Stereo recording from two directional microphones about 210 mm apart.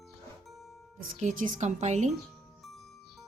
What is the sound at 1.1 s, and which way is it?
Speech, 35° right (ahead or behind).